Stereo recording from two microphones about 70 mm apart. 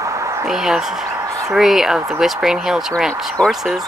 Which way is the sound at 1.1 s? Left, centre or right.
Right.